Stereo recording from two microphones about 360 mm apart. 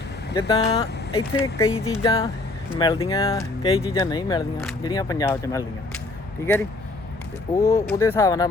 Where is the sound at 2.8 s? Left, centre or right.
Centre.